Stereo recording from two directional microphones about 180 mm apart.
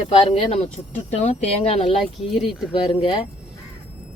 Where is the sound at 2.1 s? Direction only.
Centre (ahead or behind).